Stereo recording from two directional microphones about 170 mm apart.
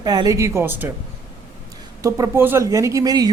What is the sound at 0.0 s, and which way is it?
Speech, 20° right (ahead or behind).